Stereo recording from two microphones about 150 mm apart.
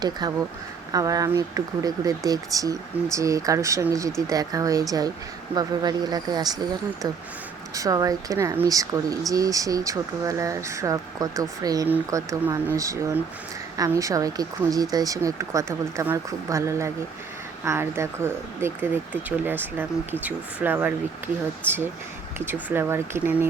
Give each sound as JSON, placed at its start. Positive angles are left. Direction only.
{"t": 0.0, "sound": "speech", "side_deg": -25}
{"t": 7.7, "sound": "speech", "side_deg": -20}
{"t": 22.7, "sound": "speech", "side_deg": -15}